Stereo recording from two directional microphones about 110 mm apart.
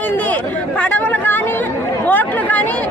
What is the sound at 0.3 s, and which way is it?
A woman's voice, 15° left (ahead or behind).